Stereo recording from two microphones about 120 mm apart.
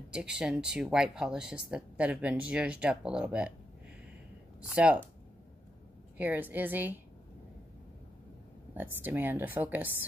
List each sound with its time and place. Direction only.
0.1 s speech: 5° right (ahead or behind)
4.7 s speech: 10° right (ahead or behind)
6.1 s speech: 15° right (ahead or behind)
8.7 s speech: 15° right (ahead or behind)